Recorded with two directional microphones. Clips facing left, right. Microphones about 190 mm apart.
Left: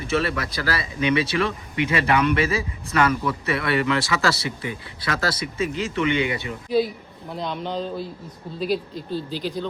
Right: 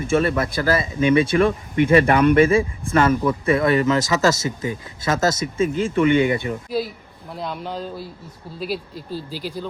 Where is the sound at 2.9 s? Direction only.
30° right (ahead or behind).